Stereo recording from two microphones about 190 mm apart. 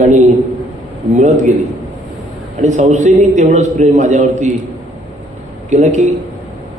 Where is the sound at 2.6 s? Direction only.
35° right (ahead or behind).